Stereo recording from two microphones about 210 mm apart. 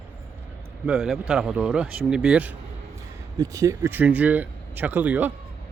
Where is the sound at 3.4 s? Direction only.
15° right (ahead or behind).